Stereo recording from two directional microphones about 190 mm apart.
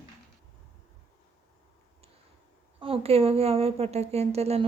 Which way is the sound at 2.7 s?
30° right (ahead or behind).